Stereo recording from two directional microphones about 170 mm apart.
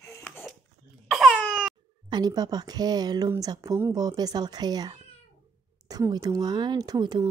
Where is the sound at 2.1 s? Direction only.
25° right (ahead or behind).